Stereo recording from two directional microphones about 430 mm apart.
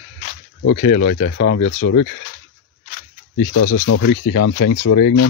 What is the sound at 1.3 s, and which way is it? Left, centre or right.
Speech, left.